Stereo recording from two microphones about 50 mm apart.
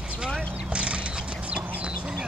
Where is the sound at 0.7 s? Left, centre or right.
Right.